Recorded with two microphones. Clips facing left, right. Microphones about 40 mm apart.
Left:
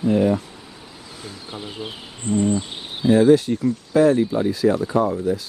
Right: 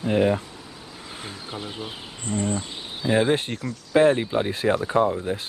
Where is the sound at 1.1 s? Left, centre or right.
Right.